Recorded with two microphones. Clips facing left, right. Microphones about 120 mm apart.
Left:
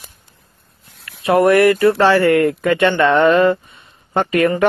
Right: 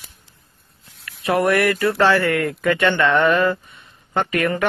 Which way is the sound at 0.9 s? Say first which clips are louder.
Even; 60° left (ahead or behind).